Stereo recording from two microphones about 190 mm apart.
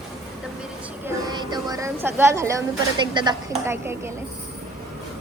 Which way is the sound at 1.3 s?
20° right (ahead or behind).